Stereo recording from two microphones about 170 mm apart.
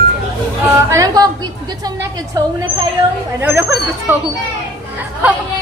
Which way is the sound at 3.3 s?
15° right (ahead or behind).